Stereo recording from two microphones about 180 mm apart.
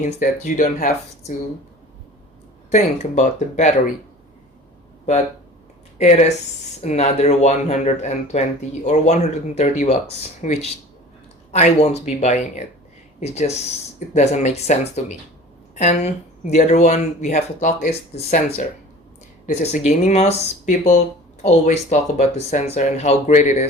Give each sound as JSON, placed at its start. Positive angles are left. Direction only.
{"t": 0.0, "sound": "speech", "side_deg": 45}
{"t": 2.6, "sound": "speech", "side_deg": 40}
{"t": 6.0, "sound": "speech", "side_deg": 40}